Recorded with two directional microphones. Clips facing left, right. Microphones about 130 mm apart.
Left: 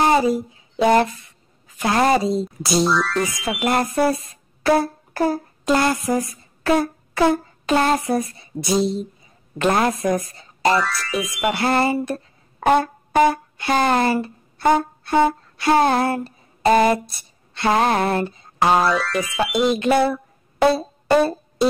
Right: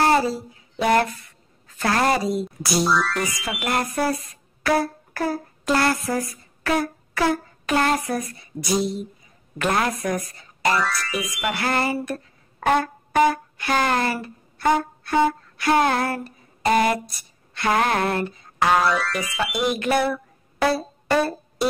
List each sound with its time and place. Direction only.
0.0 s a sound: 15° left (ahead or behind)
1.7 s speech: 15° left (ahead or behind)
2.9 s speech: centre (ahead or behind)
3.6 s speech: 25° left (ahead or behind)
10.8 s speech: centre (ahead or behind)
11.5 s music: 25° left (ahead or behind)
16.6 s speech: 25° left (ahead or behind)
18.9 s speech: centre (ahead or behind)
19.7 s speech: 25° left (ahead or behind)
20.6 s music: 25° left (ahead or behind)